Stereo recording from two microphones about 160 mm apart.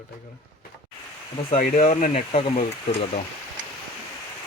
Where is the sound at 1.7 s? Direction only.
45° left (ahead or behind).